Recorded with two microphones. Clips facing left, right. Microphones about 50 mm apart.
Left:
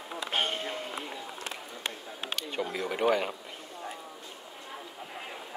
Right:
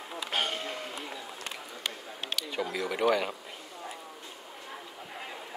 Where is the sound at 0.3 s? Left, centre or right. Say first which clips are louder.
Left 1 dB; left.